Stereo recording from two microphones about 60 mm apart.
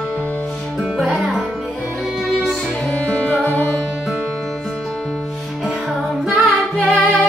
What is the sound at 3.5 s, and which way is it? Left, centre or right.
Music, left.